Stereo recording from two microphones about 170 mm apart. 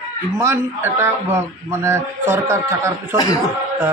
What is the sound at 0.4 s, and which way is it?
A man's voice, 15° right (ahead or behind).